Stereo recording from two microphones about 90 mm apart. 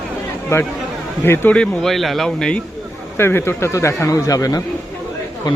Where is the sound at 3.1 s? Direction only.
25° left (ahead or behind).